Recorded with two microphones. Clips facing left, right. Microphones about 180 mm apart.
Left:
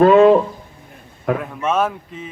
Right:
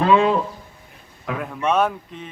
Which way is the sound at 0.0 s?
50° left (ahead or behind).